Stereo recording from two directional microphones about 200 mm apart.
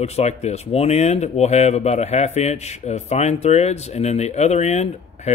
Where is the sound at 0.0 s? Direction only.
35° left (ahead or behind).